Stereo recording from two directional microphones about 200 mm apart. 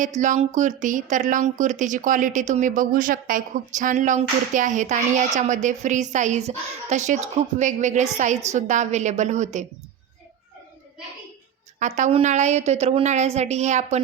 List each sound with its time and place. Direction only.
0.0 s a woman's voice: 40° right (ahead or behind)
11.8 s a woman's voice: 35° right (ahead or behind)